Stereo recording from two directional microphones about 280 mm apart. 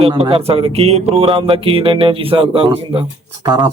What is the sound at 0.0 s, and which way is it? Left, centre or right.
Speech, centre.